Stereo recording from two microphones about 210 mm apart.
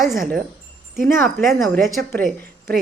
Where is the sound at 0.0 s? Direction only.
Centre (ahead or behind).